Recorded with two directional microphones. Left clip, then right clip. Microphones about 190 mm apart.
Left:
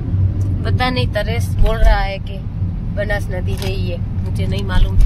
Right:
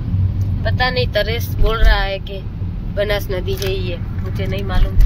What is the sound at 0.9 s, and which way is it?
Speech, 5° right (ahead or behind).